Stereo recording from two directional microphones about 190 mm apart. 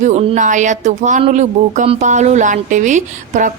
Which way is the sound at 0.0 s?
35° right (ahead or behind).